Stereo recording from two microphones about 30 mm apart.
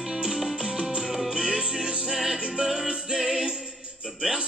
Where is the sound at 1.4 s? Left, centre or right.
Right.